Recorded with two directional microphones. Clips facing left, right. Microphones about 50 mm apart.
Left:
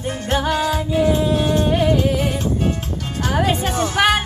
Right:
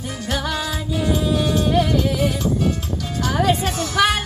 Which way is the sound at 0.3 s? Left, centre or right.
Left.